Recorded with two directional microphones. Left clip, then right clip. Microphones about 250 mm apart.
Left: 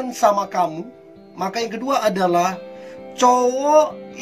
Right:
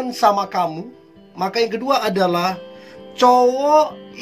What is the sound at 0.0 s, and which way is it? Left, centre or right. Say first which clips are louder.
Music: right 1 dB; centre.